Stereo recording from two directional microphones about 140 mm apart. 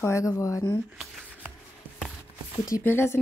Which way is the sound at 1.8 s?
10° right (ahead or behind).